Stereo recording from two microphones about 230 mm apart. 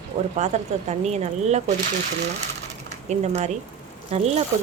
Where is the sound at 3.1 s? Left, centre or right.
Right.